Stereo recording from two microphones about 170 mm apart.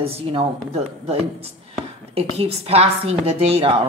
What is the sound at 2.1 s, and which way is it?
A woman's voice, 35° right (ahead or behind).